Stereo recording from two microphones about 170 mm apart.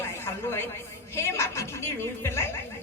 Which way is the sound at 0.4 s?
15° left (ahead or behind).